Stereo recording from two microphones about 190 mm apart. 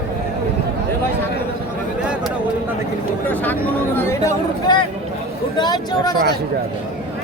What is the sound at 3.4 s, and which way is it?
Speech, 10° left (ahead or behind).